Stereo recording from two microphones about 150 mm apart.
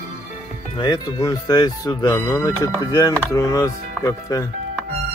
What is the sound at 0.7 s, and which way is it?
Speech, 30° left (ahead or behind).